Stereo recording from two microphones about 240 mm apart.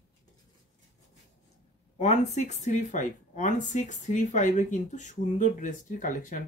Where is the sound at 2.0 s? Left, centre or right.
Left.